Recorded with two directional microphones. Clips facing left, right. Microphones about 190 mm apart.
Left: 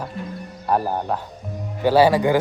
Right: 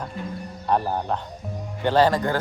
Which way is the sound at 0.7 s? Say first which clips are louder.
Left 2 dB; 5° left (ahead or behind).